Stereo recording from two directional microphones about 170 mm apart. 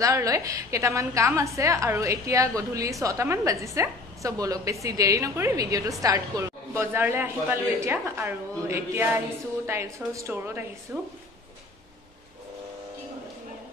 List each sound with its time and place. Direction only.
0.0 s a woman's voice: 20° right (ahead or behind)